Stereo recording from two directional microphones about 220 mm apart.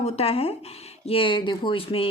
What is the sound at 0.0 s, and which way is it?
Speech, 25° left (ahead or behind).